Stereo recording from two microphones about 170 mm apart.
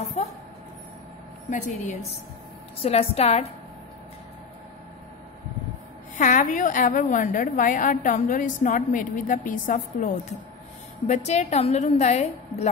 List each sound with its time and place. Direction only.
0.0 s a sound: 40° left (ahead or behind)
1.5 s a woman's voice: 45° left (ahead or behind)
6.1 s a woman's voice: 50° left (ahead or behind)